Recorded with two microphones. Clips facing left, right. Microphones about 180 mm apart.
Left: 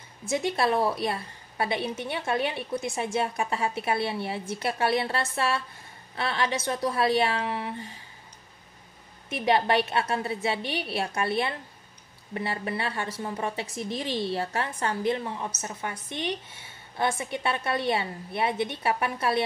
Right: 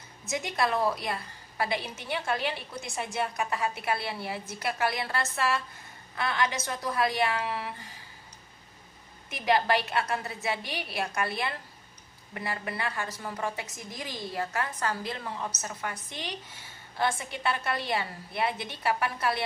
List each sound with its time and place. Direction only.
0.3 s a woman's voice: 30° left (ahead or behind)
9.3 s a woman's voice: 25° left (ahead or behind)